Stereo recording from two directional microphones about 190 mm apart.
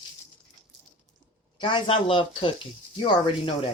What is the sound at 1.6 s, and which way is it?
Speech, 25° left (ahead or behind).